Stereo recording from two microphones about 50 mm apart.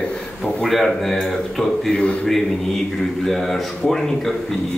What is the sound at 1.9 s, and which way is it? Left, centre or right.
Speech, left.